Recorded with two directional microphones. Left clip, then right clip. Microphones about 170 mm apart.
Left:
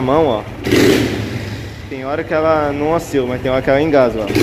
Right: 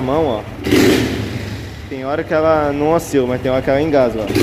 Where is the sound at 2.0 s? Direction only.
20° right (ahead or behind).